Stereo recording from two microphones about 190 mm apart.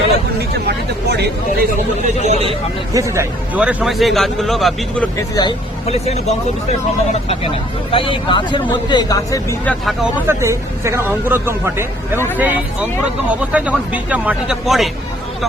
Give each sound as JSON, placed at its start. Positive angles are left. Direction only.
{"t": 1.1, "sound": "speech", "side_deg": -60}
{"t": 2.2, "sound": "speech", "side_deg": -35}
{"t": 2.9, "sound": "a man's voice", "side_deg": -15}
{"t": 5.3, "sound": "speech", "side_deg": 20}
{"t": 5.8, "sound": "speech", "side_deg": 35}
{"t": 9.8, "sound": "a man's voice", "side_deg": 0}
{"t": 10.2, "sound": "speech", "side_deg": -15}